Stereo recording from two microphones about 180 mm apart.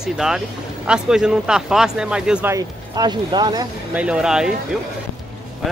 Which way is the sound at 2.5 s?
20° right (ahead or behind).